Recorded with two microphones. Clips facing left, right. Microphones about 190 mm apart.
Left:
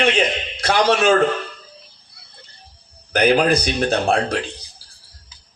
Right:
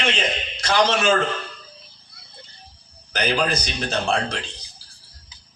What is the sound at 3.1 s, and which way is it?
Speech, 55° left (ahead or behind).